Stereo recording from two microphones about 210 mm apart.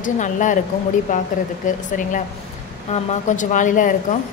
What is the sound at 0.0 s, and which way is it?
Speech, 35° left (ahead or behind).